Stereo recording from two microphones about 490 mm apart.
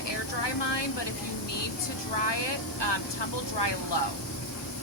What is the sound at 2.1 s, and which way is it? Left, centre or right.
Speech, left.